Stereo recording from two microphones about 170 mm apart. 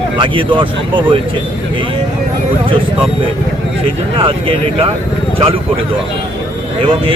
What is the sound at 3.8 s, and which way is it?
Speech, 35° right (ahead or behind).